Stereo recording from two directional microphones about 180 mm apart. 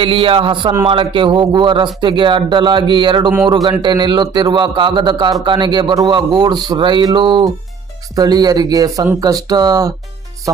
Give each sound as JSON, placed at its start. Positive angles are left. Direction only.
{"t": 0.0, "sound": "a man's voice", "side_deg": -30}